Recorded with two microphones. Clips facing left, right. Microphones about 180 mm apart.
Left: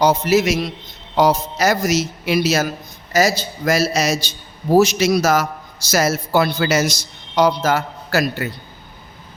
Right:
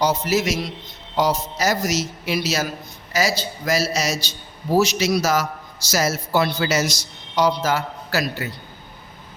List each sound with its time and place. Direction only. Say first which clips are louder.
0.0 s a man's voice: left 5 dB; 60° left (ahead or behind)